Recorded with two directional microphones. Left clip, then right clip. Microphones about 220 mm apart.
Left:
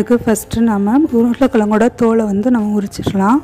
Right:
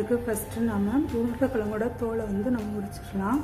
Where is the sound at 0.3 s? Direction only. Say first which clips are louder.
Left 14 dB; 40° left (ahead or behind).